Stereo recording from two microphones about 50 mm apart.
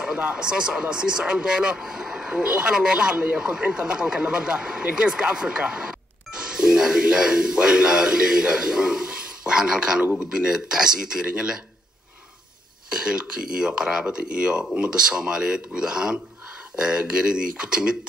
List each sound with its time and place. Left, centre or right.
0.0 s speech: centre
12.9 s speech: centre